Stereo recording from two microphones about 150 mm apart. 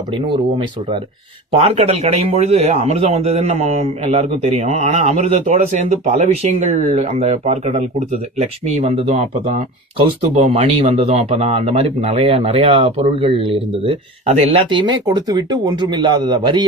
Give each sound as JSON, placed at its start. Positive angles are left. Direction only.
{"t": 1.5, "sound": "a man's voice", "side_deg": -45}